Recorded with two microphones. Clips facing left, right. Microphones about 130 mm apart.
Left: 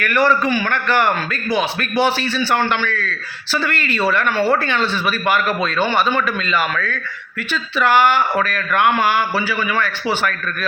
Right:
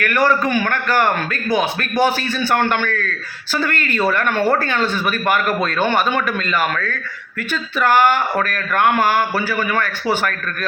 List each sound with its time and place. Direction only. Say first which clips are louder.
0.0 s a man's voice: even; 45° right (ahead or behind)